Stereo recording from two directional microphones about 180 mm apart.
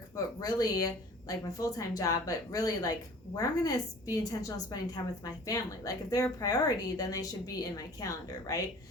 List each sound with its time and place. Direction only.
0.3 s a woman's voice: 20° left (ahead or behind)